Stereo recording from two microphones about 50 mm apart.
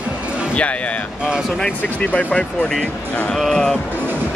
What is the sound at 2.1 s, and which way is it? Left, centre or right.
Speech, centre.